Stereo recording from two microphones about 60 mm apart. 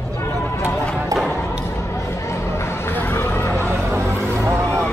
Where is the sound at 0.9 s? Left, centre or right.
Centre.